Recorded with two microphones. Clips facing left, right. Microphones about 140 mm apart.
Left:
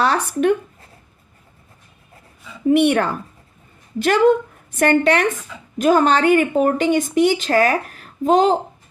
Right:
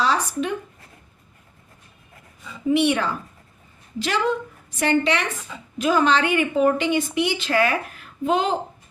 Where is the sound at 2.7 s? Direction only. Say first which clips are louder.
Left 4 dB; 55° left (ahead or behind).